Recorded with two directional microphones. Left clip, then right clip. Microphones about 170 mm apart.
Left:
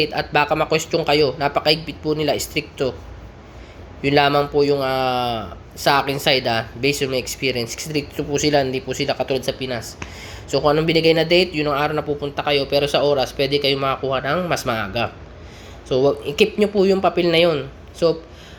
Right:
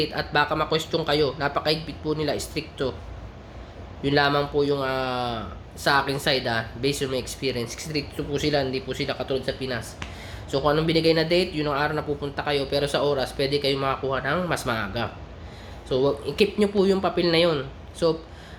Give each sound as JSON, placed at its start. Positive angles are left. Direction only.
{"t": 0.0, "sound": "a man's voice", "side_deg": 10}
{"t": 4.0, "sound": "a man's voice", "side_deg": 15}